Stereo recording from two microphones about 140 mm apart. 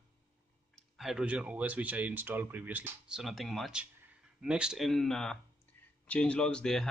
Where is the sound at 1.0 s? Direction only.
5° right (ahead or behind).